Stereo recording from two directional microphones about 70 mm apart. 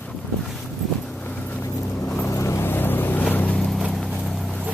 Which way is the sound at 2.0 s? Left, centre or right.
Centre.